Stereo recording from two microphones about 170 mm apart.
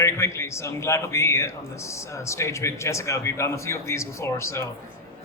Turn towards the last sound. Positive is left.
turn(degrees=15)  # may be behind; listen again after turning